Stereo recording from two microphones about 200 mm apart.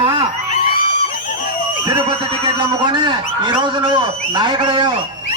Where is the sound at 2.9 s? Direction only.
25° right (ahead or behind).